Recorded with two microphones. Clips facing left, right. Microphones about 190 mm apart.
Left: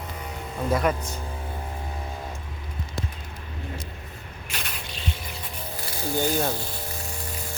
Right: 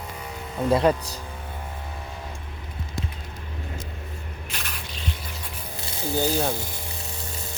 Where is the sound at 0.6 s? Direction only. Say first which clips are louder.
Right 4 dB; 30° right (ahead or behind).